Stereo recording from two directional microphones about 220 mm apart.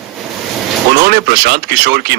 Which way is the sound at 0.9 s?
45° right (ahead or behind).